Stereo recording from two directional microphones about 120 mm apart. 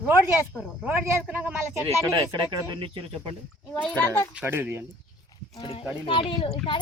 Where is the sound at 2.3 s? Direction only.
40° right (ahead or behind).